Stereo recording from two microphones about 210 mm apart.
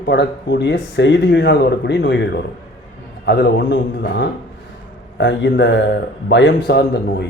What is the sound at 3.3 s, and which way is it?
Speech, 55° left (ahead or behind).